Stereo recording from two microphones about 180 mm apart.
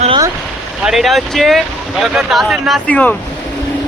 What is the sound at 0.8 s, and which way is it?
Speech, centre (ahead or behind).